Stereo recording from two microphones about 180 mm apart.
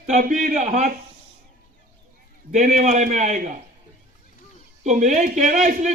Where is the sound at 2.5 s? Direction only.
40° right (ahead or behind).